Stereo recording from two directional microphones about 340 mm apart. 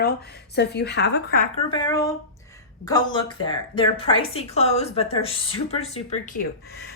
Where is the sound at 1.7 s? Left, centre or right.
Centre.